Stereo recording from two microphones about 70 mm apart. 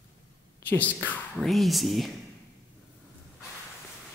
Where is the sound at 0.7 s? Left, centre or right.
Left.